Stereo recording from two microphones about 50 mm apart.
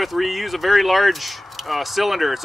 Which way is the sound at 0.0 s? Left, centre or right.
Centre.